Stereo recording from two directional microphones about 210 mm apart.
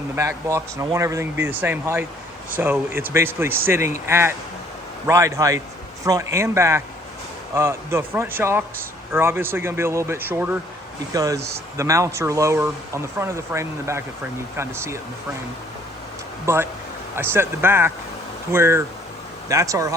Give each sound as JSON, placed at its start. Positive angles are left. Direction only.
{"t": 0.2, "sound": "speech", "side_deg": -15}
{"t": 16.5, "sound": "speech", "side_deg": -15}